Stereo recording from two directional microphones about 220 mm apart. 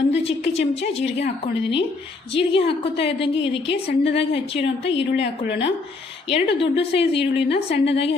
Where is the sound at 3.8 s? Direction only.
50° left (ahead or behind).